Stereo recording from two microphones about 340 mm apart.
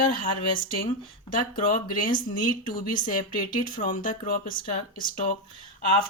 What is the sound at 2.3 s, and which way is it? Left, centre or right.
Speech, left.